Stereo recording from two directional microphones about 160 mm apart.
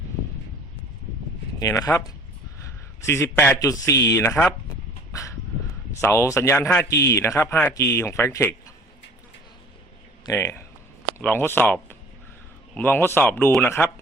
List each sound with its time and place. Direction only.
1.5 s speech: 20° left (ahead or behind)
5.1 s dog: 20° left (ahead or behind)
6.0 s speech: 15° left (ahead or behind)
10.2 s speech: 15° left (ahead or behind)